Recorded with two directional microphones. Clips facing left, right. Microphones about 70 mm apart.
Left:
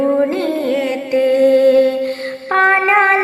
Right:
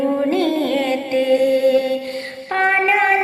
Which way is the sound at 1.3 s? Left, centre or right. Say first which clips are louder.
Left 6 dB; left.